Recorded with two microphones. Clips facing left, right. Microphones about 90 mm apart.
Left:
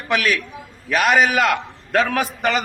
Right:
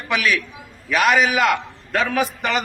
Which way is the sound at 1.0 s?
50° left (ahead or behind).